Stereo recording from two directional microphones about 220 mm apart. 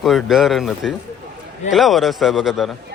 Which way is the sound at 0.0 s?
Centre (ahead or behind).